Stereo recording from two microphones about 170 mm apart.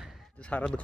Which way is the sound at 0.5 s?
10° left (ahead or behind).